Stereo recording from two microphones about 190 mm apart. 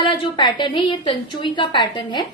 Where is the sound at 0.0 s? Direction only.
25° left (ahead or behind).